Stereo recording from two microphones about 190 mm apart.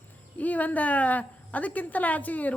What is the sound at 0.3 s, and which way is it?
A woman's voice, 10° left (ahead or behind).